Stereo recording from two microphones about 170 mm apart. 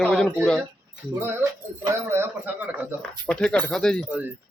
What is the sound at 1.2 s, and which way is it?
Speech, 15° right (ahead or behind).